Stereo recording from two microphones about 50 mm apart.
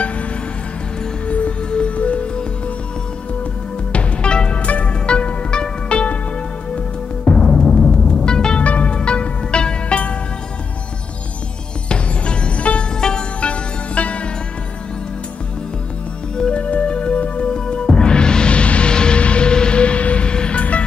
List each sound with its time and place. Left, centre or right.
1.2 s music: left
3.9 s music: centre
7.3 s music: centre
11.9 s music: centre
16.3 s music: centre
16.6 s music: left